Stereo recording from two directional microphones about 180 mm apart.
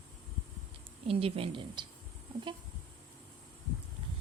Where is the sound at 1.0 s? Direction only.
30° right (ahead or behind).